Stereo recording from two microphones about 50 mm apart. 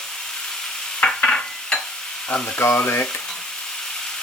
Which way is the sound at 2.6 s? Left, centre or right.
Left.